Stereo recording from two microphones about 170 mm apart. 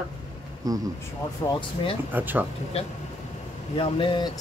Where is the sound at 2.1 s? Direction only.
10° right (ahead or behind).